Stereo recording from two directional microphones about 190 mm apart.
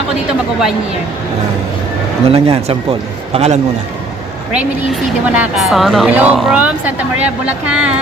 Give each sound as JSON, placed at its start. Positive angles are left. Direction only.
{"t": 2.2, "sound": "speech", "side_deg": -30}
{"t": 4.5, "sound": "a woman's voice", "side_deg": -5}